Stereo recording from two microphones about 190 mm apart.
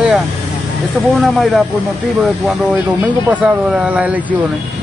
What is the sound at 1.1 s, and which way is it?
Speech, centre (ahead or behind).